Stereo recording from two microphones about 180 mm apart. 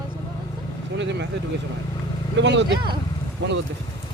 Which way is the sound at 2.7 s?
25° right (ahead or behind).